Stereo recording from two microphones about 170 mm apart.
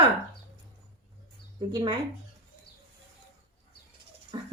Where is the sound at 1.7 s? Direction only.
25° right (ahead or behind).